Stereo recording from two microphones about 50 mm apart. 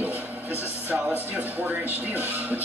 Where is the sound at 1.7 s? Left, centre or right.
Right.